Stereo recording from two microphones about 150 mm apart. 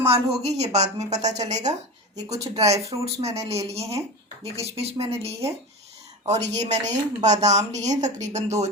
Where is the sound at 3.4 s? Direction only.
45° right (ahead or behind).